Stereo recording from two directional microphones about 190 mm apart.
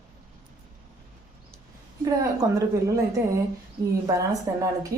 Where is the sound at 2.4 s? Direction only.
20° right (ahead or behind).